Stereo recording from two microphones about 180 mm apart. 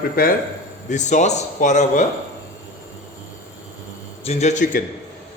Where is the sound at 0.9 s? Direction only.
40° left (ahead or behind).